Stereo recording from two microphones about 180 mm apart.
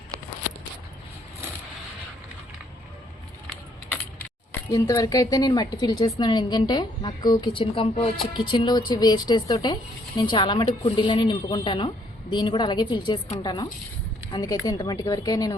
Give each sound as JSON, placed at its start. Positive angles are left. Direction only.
{"t": 4.7, "sound": "a woman's voice", "side_deg": 20}